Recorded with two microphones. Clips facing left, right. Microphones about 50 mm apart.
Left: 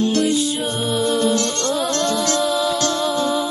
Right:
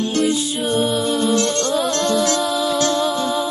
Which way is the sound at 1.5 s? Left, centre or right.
Right.